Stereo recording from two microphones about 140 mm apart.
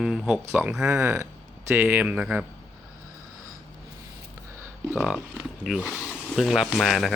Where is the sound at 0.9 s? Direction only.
20° right (ahead or behind).